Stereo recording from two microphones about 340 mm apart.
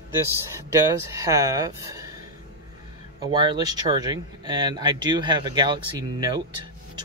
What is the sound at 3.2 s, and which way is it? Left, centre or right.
Speech, centre.